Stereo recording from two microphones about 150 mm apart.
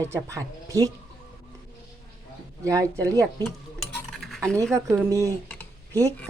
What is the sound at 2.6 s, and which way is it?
Speech, 20° right (ahead or behind).